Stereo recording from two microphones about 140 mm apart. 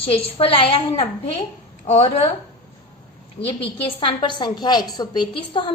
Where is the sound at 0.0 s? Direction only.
40° left (ahead or behind).